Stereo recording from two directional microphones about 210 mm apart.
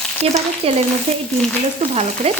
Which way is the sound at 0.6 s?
25° right (ahead or behind).